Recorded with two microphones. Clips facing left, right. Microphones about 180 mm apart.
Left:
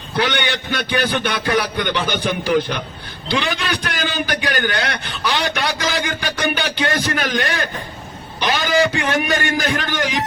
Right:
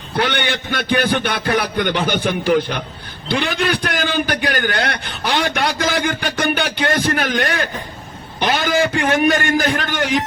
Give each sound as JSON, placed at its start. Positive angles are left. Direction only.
{"t": 0.2, "sound": "a man's voice", "side_deg": -50}